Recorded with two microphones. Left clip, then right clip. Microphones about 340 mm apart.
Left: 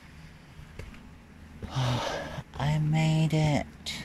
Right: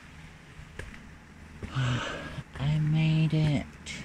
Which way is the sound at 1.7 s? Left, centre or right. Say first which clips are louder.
Left 2 dB; centre.